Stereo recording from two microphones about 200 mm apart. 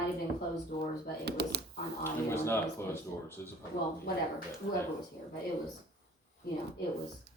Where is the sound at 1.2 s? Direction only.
55° right (ahead or behind).